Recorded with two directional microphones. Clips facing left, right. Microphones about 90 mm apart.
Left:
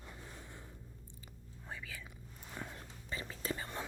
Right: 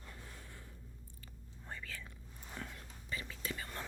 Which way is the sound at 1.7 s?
10° left (ahead or behind).